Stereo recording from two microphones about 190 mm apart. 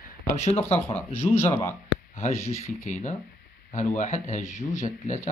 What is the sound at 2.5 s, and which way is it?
Speech, 35° left (ahead or behind).